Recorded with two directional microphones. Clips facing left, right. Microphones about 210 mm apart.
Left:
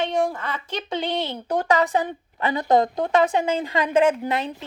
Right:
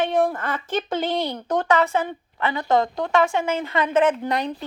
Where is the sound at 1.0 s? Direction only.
Centre (ahead or behind).